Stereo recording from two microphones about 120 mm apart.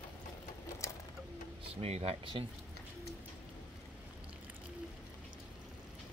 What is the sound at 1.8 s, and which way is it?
Speech, 60° right (ahead or behind).